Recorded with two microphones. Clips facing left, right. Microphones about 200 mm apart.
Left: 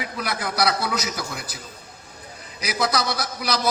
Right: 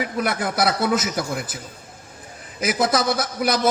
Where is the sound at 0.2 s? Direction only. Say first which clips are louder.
Right 2 dB; 50° right (ahead or behind).